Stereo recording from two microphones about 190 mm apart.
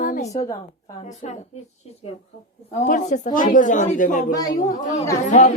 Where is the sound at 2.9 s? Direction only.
40° left (ahead or behind).